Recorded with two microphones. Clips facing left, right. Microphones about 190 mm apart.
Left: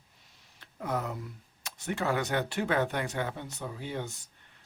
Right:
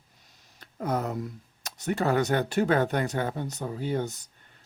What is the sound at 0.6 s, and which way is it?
Speech, 40° right (ahead or behind).